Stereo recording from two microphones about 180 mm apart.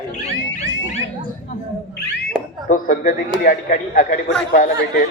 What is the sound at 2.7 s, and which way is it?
Speech, 45° left (ahead or behind).